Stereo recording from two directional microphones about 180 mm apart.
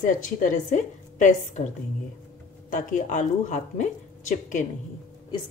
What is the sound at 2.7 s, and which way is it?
A woman's voice, 45° left (ahead or behind).